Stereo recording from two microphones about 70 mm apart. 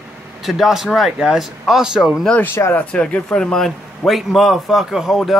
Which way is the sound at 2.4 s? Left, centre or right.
Left.